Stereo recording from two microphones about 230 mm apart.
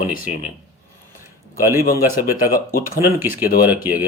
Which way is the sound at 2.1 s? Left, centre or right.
Left.